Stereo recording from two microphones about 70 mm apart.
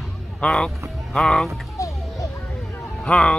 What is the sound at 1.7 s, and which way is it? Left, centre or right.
Music, left.